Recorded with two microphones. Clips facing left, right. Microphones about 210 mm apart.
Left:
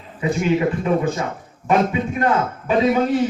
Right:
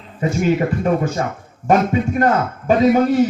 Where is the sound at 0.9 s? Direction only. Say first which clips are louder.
Right 1 dB; 45° right (ahead or behind).